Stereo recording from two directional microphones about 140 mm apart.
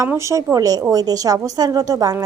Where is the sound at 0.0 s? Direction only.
20° right (ahead or behind).